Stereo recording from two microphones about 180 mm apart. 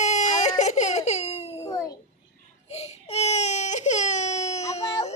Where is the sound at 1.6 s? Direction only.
20° left (ahead or behind).